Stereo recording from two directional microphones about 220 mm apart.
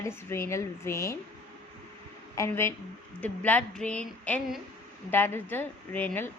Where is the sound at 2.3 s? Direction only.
10° left (ahead or behind).